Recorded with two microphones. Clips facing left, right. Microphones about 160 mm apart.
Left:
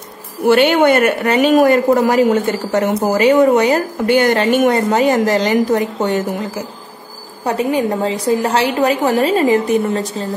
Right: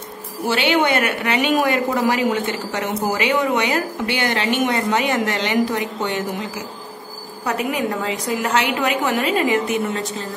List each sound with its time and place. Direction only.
0.5 s a woman's voice: 55° left (ahead or behind)
7.4 s a woman's voice: 30° left (ahead or behind)